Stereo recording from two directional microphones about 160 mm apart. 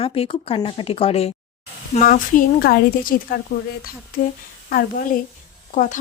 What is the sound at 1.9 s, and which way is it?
A woman's voice, 60° left (ahead or behind).